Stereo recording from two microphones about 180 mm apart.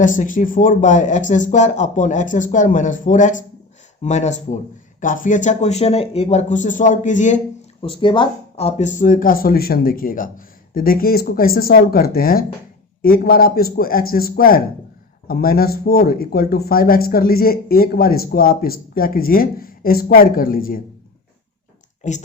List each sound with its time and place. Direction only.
0.0 s a man's voice: 45° left (ahead or behind)
7.8 s speech: 30° left (ahead or behind); by 20.8 s 50° left (ahead or behind)